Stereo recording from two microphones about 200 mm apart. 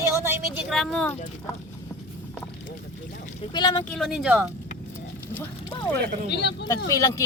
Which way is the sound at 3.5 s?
20° left (ahead or behind).